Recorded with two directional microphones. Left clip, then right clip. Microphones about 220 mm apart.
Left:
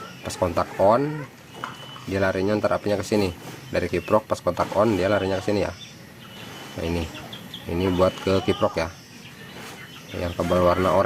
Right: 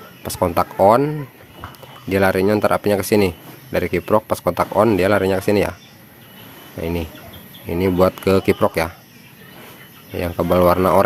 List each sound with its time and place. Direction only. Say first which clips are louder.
0.2 s a man's voice: right 5 dB; 35° right (ahead or behind)
7.7 s a man's voice: right 5 dB; 35° right (ahead or behind)
10.2 s a man's voice: right 6 dB; 35° right (ahead or behind)